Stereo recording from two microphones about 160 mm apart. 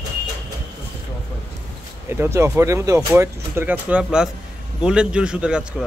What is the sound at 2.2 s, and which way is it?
A man's voice, 15° right (ahead or behind).